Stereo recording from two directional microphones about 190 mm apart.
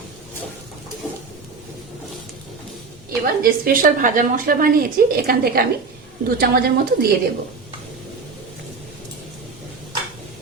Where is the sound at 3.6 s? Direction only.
50° right (ahead or behind).